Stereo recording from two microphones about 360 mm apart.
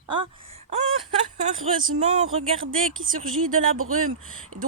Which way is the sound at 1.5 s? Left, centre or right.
Centre.